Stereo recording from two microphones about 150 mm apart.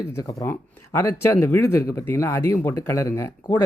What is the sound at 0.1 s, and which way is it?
Speech, 20° left (ahead or behind).